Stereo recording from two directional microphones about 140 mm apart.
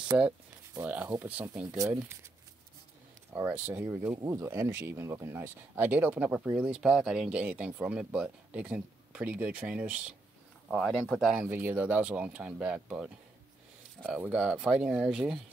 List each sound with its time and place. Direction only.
0.8 s speech: 15° right (ahead or behind)
3.3 s speech: 15° right (ahead or behind)
10.7 s speech: 5° left (ahead or behind)
11.3 s speech: 15° right (ahead or behind)